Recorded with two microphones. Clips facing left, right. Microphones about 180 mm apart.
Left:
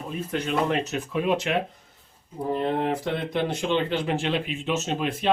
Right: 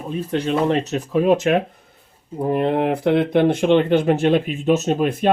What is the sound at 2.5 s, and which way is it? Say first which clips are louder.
Speech: right 6 dB; 65° right (ahead or behind).